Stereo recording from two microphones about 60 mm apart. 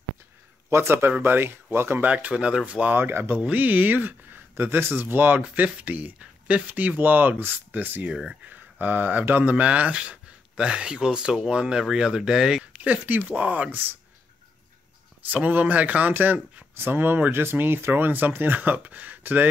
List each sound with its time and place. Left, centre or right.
0.7 s speech: right
2.0 s speech: right
3.0 s speech: right
3.4 s speech: right
8.1 s speech: centre
8.5 s speech: right
9.7 s speech: right
12.8 s speech: right
15.2 s speech: right